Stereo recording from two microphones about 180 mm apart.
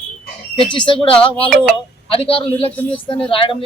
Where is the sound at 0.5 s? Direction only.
25° left (ahead or behind).